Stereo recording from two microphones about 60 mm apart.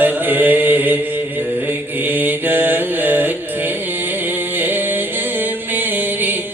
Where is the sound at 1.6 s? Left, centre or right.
Right.